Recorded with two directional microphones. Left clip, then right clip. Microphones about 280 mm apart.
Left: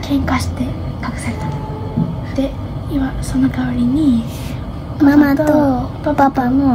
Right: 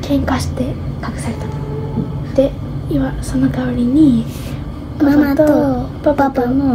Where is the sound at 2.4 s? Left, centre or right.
Centre.